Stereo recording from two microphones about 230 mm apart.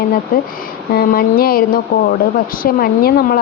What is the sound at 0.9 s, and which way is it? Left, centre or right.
Speech, left.